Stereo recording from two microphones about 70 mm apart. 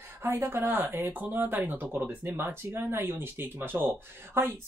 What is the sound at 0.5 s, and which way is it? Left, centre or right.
Speech, right.